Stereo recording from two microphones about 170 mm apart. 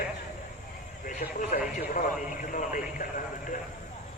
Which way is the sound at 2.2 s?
50° left (ahead or behind).